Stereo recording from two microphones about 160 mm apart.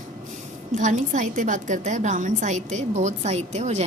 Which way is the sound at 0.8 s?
50° right (ahead or behind).